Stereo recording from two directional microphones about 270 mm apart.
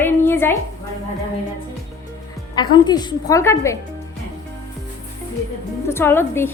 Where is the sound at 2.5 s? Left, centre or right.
Centre.